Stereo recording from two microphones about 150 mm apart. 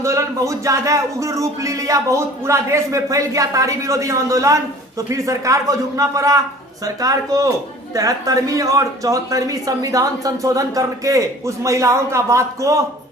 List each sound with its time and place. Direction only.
0.0 s speech: 20° right (ahead or behind)